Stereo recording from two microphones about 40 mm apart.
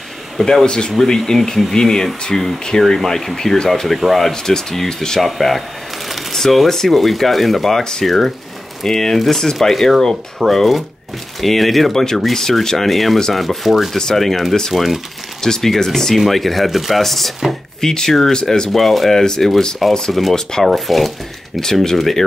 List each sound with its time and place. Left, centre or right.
0.7 s speech: left; by 4.3 s centre
4.3 s speech: centre
5.2 s speech: centre
6.0 s a sound: centre
6.4 s speech: centre
13.9 s speech: centre
15.4 s speech: centre
20.1 s speech: centre
21.5 s speech: centre